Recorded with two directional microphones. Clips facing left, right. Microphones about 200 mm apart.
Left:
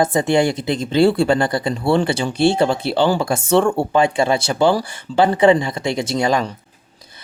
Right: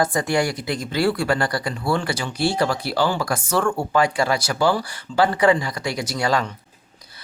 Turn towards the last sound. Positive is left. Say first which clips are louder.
# left 4 dB
turn(degrees=20)  # may be behind; listen again after turning